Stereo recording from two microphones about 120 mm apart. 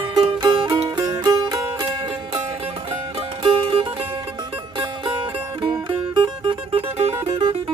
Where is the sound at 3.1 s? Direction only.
50° right (ahead or behind).